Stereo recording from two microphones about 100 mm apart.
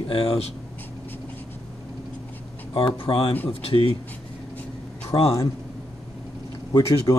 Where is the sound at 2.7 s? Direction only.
65° left (ahead or behind).